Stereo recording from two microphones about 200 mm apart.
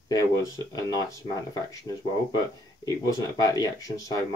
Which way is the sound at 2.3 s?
20° left (ahead or behind).